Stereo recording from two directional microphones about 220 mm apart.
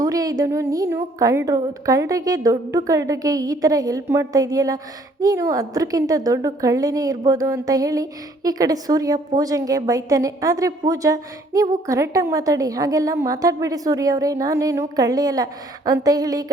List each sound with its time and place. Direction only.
0.0 s a woman's voice: 15° right (ahead or behind)